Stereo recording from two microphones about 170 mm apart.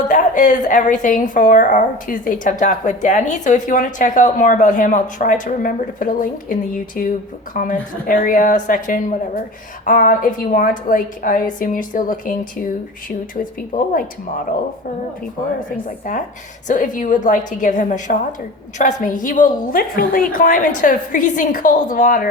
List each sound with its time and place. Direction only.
0.0 s a woman's voice: 50° left (ahead or behind)
13.4 s a woman's voice: 55° left (ahead or behind)
16.1 s a woman's voice: 50° left (ahead or behind)